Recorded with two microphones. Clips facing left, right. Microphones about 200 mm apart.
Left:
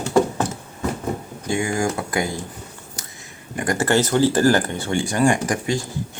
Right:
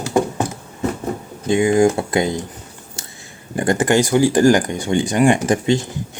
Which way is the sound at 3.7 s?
15° right (ahead or behind).